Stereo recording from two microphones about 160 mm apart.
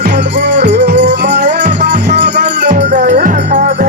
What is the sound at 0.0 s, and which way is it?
Music, 80° right.